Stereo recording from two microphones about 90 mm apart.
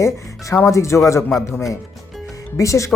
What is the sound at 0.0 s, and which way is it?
Speech, 35° left (ahead or behind).